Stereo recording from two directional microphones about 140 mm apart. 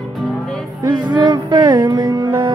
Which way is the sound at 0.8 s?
30° right (ahead or behind).